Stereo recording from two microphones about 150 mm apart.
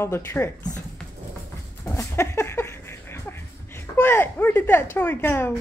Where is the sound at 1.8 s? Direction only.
20° left (ahead or behind).